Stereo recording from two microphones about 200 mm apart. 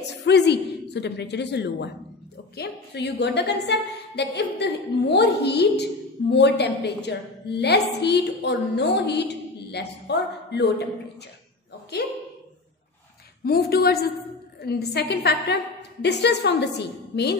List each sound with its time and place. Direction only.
0.2 s a woman's voice: 55° left (ahead or behind)
11.9 s a woman's voice: 55° left (ahead or behind)
13.4 s a woman's voice: 50° left (ahead or behind)